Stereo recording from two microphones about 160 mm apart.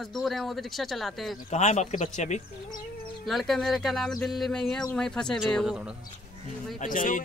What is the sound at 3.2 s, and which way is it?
Speech, centre (ahead or behind).